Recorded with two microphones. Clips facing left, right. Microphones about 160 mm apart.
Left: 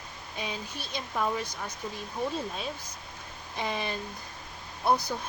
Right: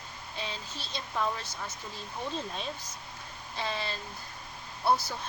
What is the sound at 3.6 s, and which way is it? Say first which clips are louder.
Speech: left 3 dB; 15° left (ahead or behind).